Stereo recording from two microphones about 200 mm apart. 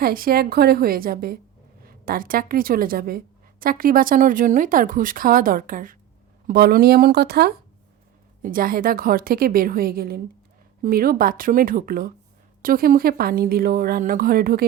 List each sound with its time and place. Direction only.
0.0 s a woman's voice: 45° right (ahead or behind)